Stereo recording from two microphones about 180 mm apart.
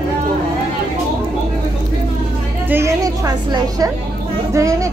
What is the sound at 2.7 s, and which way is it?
Music, 15° right (ahead or behind).